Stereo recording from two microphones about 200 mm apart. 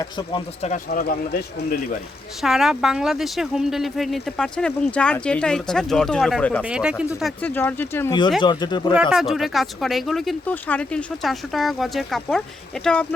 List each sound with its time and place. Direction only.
0.0 s speech: 20° left (ahead or behind)
0.6 s speech: 40° left (ahead or behind)
2.4 s speech: centre (ahead or behind)
8.4 s speech: 20° left (ahead or behind)
8.9 s speech: 5° right (ahead or behind)